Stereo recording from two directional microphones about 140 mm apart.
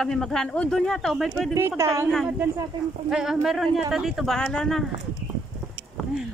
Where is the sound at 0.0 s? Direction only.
5° left (ahead or behind).